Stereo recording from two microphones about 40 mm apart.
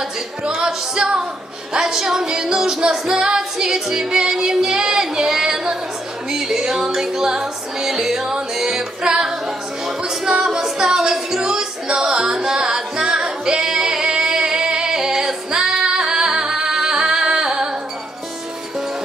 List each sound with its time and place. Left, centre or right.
0.5 s music: centre